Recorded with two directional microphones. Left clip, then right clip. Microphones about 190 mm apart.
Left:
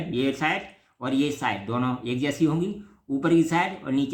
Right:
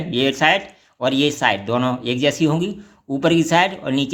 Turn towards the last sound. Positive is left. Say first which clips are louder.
# right 7 dB
turn(degrees=-30)  # may be behind; listen again after turning